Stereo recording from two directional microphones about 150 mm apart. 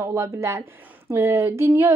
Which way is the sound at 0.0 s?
20° right (ahead or behind).